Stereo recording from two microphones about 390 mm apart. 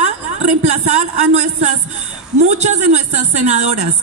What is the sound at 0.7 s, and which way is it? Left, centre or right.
A woman's voice, centre.